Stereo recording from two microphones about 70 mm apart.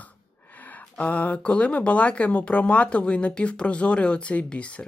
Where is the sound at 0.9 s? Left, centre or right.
Left.